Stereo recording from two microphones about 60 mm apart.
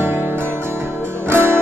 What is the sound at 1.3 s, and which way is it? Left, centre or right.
Music, right.